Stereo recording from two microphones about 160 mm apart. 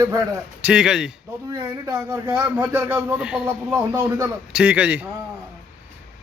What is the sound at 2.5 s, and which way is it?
A man's voice, 10° right (ahead or behind).